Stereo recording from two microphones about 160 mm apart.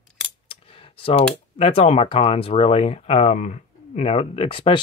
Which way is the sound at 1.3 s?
40° left (ahead or behind).